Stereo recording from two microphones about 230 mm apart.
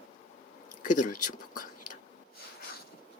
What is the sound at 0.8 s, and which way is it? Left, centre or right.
Speech, left.